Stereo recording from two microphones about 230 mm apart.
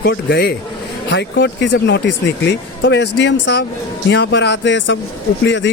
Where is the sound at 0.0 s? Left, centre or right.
Left.